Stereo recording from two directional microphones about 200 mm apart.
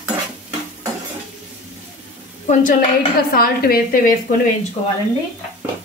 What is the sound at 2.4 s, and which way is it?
A woman's voice, 40° left (ahead or behind).